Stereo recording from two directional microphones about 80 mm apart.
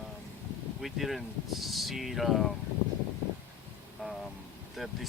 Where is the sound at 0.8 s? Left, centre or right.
Centre.